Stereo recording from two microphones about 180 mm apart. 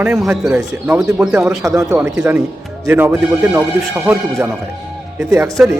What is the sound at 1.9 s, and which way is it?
Speech, 15° right (ahead or behind).